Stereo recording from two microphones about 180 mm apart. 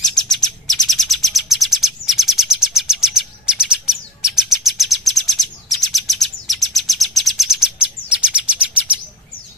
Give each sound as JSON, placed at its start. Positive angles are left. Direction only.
{"t": 0.0, "sound": "bird", "side_deg": 0}
{"t": 4.6, "sound": "chirp", "side_deg": 0}